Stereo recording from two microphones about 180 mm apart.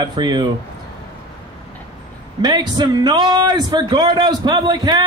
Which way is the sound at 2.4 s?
25° right (ahead or behind).